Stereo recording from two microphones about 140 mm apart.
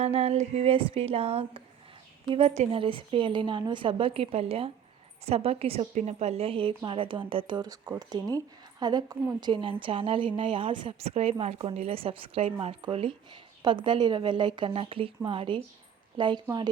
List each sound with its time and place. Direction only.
0.0 s a woman's voice: 45° right (ahead or behind)
5.9 s a woman's voice: 55° right (ahead or behind); by 11.1 s 35° right (ahead or behind)
11.1 s a woman's voice: 50° right (ahead or behind); by 16.6 s 30° right (ahead or behind)